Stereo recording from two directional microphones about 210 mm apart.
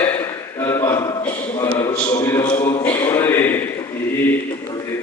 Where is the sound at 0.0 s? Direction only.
10° left (ahead or behind).